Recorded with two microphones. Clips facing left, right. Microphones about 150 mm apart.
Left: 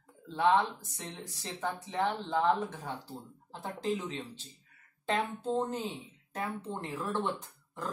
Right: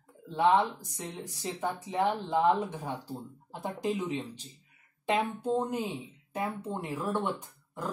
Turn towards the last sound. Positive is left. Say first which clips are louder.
# right 2 dB
turn(degrees=-10)  # may be behind; listen again after turning